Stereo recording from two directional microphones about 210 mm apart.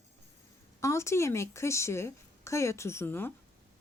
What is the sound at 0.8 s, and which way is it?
Speech, 15° left (ahead or behind).